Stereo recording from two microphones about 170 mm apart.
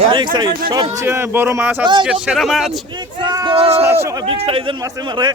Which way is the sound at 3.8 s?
15° right (ahead or behind).